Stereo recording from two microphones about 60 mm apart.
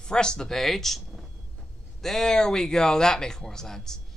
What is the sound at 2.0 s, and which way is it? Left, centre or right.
Speech, centre.